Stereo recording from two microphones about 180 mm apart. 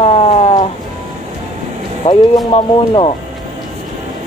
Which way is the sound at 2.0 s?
40° left (ahead or behind).